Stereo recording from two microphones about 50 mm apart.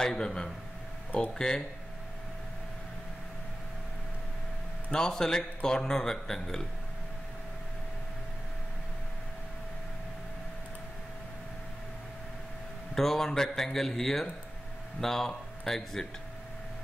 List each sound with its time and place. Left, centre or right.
0.0 s a man's voice: centre
4.9 s a man's voice: centre
12.9 s a man's voice: centre